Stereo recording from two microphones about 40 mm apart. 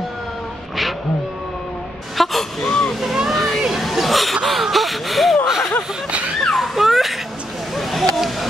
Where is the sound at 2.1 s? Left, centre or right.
Centre.